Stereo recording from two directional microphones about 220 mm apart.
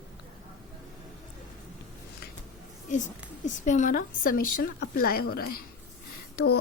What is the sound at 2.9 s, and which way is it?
A woman's voice, 35° left (ahead or behind).